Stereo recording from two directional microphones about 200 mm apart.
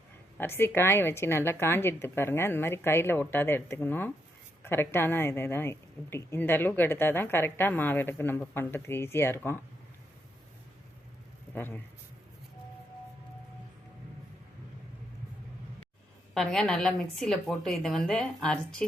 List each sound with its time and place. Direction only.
0.3 s a woman's voice: 10° left (ahead or behind)
11.5 s a woman's voice: 10° left (ahead or behind)
16.3 s a woman's voice: 5° left (ahead or behind)